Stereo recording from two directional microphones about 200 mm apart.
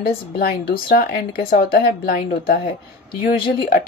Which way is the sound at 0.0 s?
50° left (ahead or behind).